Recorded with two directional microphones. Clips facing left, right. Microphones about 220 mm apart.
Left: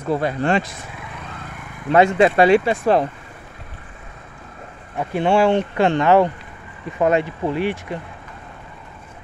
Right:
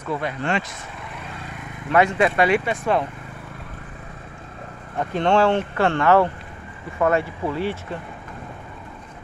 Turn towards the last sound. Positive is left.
turn(degrees=15)  # may be behind; listen again after turning